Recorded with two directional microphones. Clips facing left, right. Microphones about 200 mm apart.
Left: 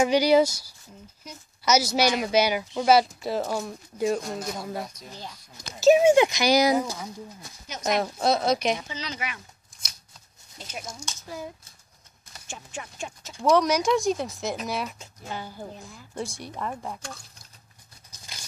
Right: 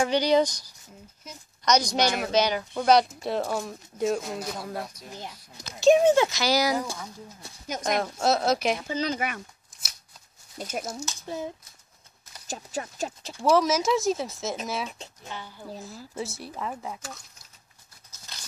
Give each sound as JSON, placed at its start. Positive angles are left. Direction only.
{"t": 0.0, "sound": "a woman's voice", "side_deg": 10}
{"t": 5.1, "sound": "speech", "side_deg": -20}
{"t": 5.8, "sound": "speech", "side_deg": 5}
{"t": 7.8, "sound": "speech", "side_deg": 0}
{"t": 8.8, "sound": "speech", "side_deg": -50}
{"t": 10.6, "sound": "speech", "side_deg": -50}
{"t": 10.9, "sound": "speech", "side_deg": -5}
{"t": 11.2, "sound": "speech", "side_deg": -25}
{"t": 12.4, "sound": "speech", "side_deg": -40}
{"t": 13.4, "sound": "speech", "side_deg": 0}
{"t": 15.2, "sound": "a woman's voice", "side_deg": 40}
{"t": 16.2, "sound": "speech", "side_deg": -5}
{"t": 18.1, "sound": "a sound", "side_deg": 10}